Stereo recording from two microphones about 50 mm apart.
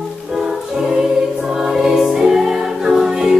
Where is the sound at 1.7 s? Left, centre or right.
Centre.